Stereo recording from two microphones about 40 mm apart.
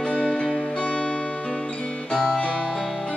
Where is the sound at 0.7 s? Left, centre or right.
Left.